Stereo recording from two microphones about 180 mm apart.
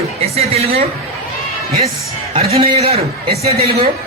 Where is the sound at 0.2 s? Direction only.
35° right (ahead or behind).